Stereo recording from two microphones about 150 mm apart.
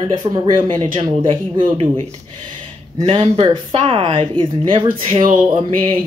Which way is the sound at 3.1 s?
40° right (ahead or behind).